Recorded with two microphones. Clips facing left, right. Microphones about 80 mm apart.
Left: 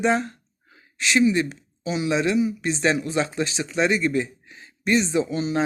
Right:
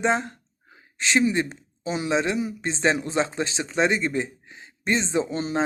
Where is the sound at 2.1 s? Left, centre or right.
Right.